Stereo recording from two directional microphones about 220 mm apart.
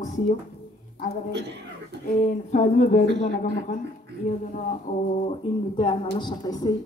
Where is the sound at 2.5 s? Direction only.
35° left (ahead or behind).